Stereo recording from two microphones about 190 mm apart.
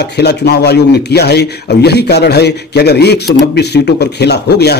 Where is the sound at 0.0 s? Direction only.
60° left (ahead or behind).